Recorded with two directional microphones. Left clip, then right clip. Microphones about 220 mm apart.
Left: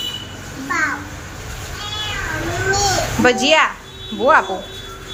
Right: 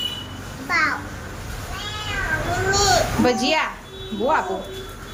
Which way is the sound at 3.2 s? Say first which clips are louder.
Left 6 dB; 5° right (ahead or behind).